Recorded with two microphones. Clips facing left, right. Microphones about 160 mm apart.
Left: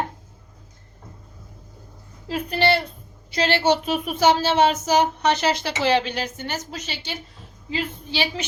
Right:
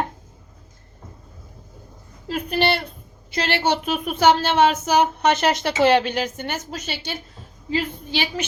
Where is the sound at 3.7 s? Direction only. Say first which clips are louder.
Left 1 dB; 55° right (ahead or behind).